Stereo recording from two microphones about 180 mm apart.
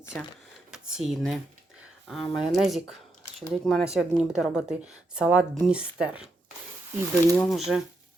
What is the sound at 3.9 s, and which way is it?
A woman's voice, 5° right (ahead or behind).